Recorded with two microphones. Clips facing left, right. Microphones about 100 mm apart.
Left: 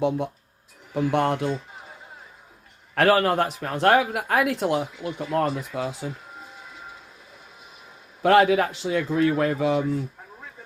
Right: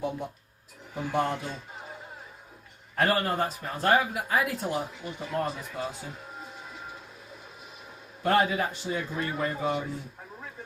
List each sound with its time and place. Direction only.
0.9 s speech: 70° left (ahead or behind)
2.9 s a man's voice: 90° left
8.2 s a man's voice: 90° left